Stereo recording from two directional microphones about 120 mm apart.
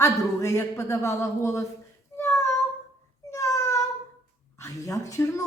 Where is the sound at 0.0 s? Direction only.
20° left (ahead or behind).